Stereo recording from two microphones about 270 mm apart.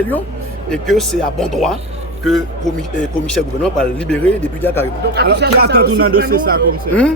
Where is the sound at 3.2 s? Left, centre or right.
Centre.